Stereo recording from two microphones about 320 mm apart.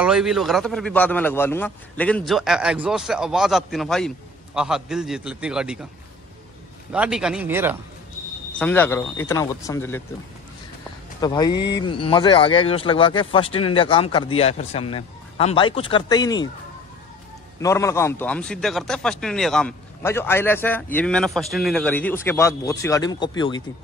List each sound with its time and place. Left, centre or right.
0.0 s a man's voice: centre
6.9 s a man's voice: centre
8.5 s speech: centre
11.1 s speech: centre
17.6 s a man's voice: centre